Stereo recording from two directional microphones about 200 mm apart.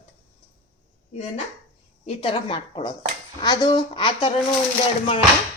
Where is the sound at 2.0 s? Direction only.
25° left (ahead or behind).